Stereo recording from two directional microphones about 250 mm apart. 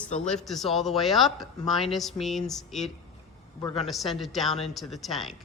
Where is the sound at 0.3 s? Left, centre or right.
Centre.